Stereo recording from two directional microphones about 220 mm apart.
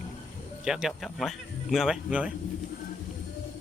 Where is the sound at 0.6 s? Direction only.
Centre (ahead or behind).